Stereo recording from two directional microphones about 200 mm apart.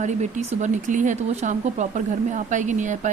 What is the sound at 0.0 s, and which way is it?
Speech, 35° right (ahead or behind).